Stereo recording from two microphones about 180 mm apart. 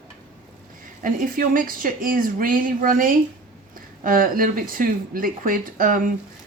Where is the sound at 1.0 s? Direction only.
50° right (ahead or behind).